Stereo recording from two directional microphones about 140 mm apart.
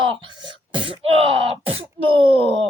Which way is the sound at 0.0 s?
35° right (ahead or behind).